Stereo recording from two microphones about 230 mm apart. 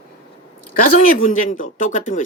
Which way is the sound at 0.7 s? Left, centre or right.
Left.